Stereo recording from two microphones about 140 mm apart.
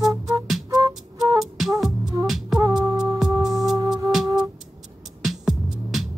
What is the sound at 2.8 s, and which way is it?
Music, 25° right (ahead or behind).